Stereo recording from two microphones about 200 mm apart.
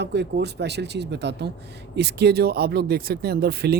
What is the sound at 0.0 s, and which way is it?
Speech, 60° right (ahead or behind).